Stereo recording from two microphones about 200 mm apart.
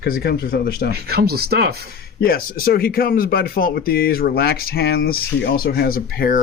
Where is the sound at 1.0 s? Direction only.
50° right (ahead or behind).